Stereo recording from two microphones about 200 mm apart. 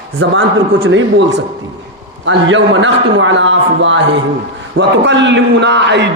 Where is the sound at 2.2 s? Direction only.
70° right (ahead or behind).